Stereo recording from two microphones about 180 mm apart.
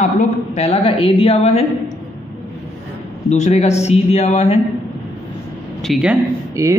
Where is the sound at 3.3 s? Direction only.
40° left (ahead or behind).